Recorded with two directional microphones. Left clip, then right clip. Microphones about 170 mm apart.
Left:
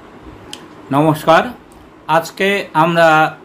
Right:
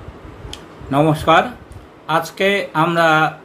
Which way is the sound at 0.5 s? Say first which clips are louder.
Left 3 dB; 25° left (ahead or behind).